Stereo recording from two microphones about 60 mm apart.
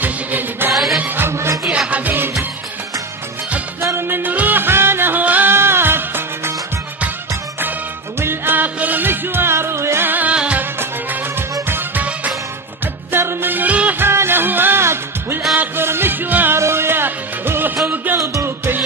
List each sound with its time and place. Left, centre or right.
0.0 s music: right
1.2 s music: right
1.9 s music: right
3.8 s music: right
4.2 s music: right
5.5 s music of bollywood: right
8.2 s music: right
10.0 s music: right
10.3 s music: centre
10.6 s music: right
13.1 s music: right
13.9 s music: right
16.5 s music: right
18.1 s music: right